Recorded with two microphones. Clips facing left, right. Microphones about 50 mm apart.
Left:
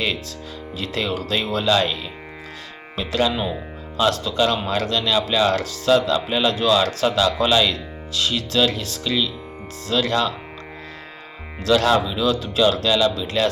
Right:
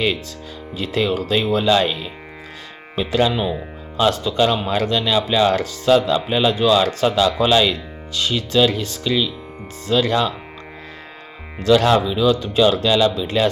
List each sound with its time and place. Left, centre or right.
0.8 s speech: centre
3.0 s speech: centre
11.6 s speech: centre